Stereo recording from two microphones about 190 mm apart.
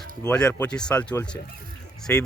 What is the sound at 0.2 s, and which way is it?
Speech, 5° left (ahead or behind).